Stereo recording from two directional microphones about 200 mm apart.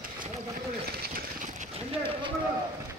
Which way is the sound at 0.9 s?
45° right (ahead or behind).